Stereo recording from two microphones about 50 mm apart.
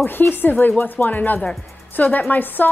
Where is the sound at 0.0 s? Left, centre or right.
Left.